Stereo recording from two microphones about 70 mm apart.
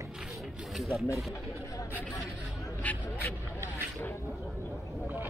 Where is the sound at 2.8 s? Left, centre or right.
Left.